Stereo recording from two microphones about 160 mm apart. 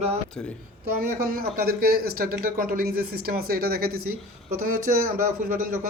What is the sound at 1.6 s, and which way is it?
Speech, 70° right (ahead or behind).